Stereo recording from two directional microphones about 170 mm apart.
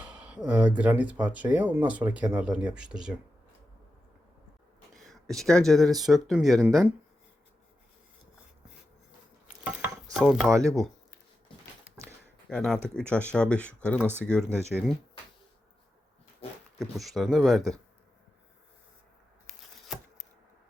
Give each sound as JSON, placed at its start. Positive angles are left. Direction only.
{"t": 0.0, "sound": "speech", "side_deg": -5}
{"t": 4.9, "sound": "speech", "side_deg": 0}
{"t": 9.6, "sound": "chopping", "side_deg": -10}
{"t": 10.5, "sound": "speech", "side_deg": -20}
{"t": 11.9, "sound": "a sound", "side_deg": -5}
{"t": 12.5, "sound": "speech", "side_deg": 5}
{"t": 14.0, "sound": "speech", "side_deg": -10}
{"t": 14.3, "sound": "speech", "side_deg": 5}
{"t": 16.9, "sound": "speech", "side_deg": 0}
{"t": 19.5, "sound": "insect", "side_deg": 0}